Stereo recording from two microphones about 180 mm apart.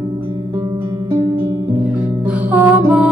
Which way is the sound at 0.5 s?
15° right (ahead or behind).